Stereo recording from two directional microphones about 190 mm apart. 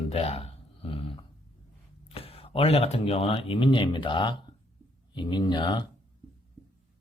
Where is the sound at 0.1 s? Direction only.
30° left (ahead or behind).